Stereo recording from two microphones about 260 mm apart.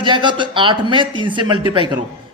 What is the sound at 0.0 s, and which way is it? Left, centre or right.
Speech, centre.